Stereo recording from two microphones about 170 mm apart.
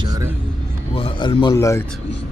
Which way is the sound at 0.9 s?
30° left (ahead or behind).